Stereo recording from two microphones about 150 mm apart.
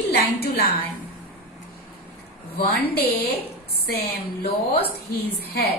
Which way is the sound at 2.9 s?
90° left.